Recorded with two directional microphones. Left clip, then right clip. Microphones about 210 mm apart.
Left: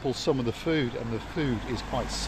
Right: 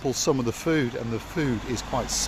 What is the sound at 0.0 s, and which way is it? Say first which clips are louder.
Speech: right 3 dB; 30° right (ahead or behind).